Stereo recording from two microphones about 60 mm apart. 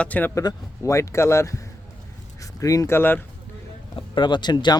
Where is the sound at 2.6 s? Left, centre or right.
Left.